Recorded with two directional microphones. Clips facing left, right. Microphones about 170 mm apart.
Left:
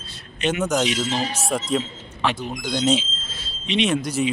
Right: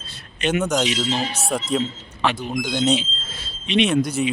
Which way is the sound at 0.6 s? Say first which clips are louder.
Right 1 dB; centre (ahead or behind).